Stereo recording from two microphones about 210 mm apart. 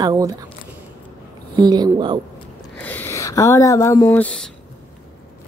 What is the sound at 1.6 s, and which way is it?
Speech, 20° right (ahead or behind).